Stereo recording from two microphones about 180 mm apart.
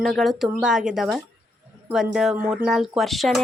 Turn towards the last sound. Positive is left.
turn(degrees=0)  # may be behind; listen again after turning